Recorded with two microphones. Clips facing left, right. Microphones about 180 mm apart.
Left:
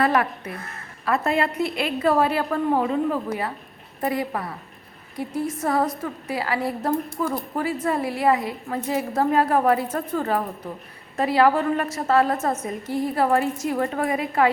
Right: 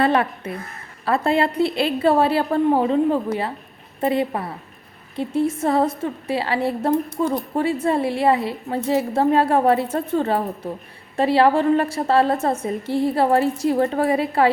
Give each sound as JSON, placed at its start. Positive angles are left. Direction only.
{"t": 0.0, "sound": "a woman's voice", "side_deg": -25}